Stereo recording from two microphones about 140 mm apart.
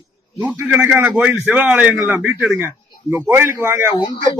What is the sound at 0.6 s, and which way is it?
A man's voice, 10° right (ahead or behind).